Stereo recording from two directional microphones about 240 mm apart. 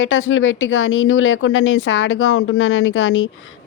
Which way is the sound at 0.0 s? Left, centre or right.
Left.